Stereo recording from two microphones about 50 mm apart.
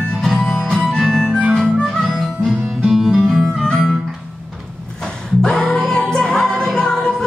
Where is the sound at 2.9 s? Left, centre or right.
Centre.